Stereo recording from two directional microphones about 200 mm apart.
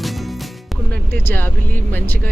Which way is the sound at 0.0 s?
Centre (ahead or behind).